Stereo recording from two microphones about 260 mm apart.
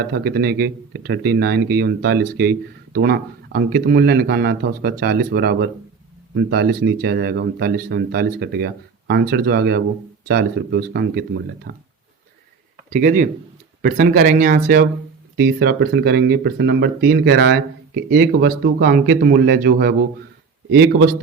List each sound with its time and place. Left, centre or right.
0.0 s speech: right
12.9 s speech: right